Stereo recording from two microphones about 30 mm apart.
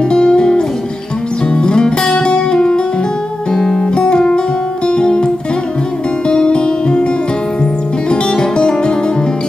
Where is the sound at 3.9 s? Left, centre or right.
Left.